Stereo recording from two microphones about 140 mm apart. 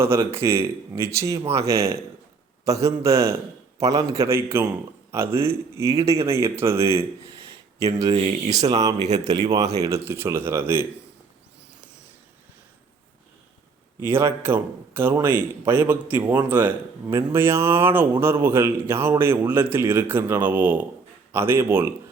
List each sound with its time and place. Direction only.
0.0 s a man's voice: 20° right (ahead or behind)
8.1 s speech: 50° right (ahead or behind)
8.7 s speech: 25° right (ahead or behind)
14.1 s a man's voice: 20° right (ahead or behind)